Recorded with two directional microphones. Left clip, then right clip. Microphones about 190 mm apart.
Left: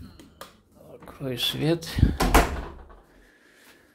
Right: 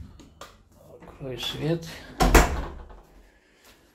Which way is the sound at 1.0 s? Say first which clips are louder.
Left 5 dB; 45° left (ahead or behind).